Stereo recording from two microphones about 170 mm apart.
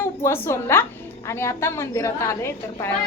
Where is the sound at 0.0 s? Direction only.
15° left (ahead or behind).